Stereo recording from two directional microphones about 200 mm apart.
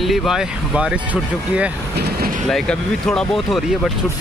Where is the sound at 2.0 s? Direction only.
50° right (ahead or behind).